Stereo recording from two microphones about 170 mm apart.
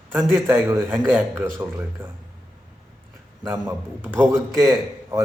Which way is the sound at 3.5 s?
15° right (ahead or behind).